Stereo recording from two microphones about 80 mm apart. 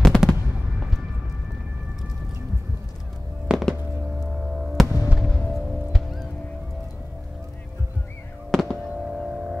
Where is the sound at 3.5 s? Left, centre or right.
Centre.